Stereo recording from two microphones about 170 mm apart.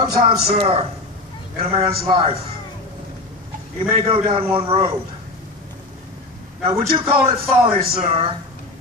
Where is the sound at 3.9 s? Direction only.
35° right (ahead or behind).